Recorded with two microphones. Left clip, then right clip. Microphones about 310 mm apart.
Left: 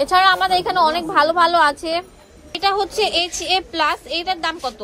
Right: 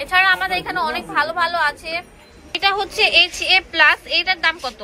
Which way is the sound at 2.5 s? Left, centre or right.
Centre.